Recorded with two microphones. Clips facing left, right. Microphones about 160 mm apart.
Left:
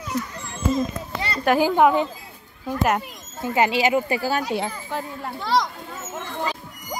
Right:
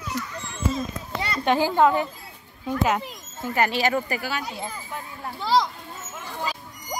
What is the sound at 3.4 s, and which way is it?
Speech, 15° left (ahead or behind).